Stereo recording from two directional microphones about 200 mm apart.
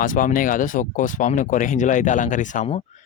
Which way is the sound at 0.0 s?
40° left (ahead or behind).